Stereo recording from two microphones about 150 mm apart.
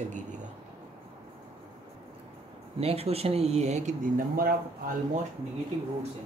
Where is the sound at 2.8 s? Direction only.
40° right (ahead or behind).